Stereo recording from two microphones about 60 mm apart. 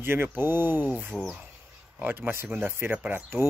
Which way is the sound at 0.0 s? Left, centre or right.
Right.